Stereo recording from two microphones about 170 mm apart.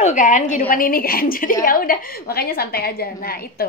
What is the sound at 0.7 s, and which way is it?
A woman's voice, 55° left (ahead or behind).